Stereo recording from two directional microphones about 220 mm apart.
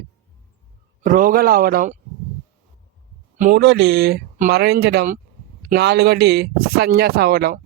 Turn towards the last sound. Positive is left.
turn(degrees=-45)  # may be behind; listen again after turning